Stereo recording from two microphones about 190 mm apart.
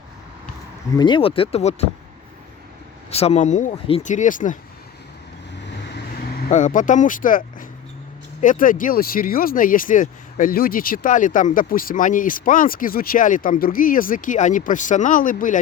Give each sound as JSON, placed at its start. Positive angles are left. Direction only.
{"t": 0.9, "sound": "speech", "side_deg": 25}
{"t": 3.1, "sound": "speech", "side_deg": 35}
{"t": 6.5, "sound": "speech", "side_deg": 40}